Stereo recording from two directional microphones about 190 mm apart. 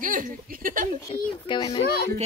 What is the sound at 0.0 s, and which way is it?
Speech, 45° right (ahead or behind).